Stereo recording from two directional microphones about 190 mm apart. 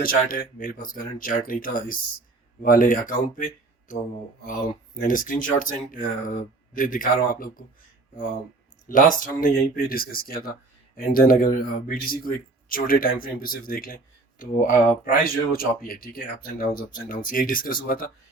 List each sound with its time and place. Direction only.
0.0 s speech: 45° left (ahead or behind)
8.9 s speech: 45° left (ahead or behind)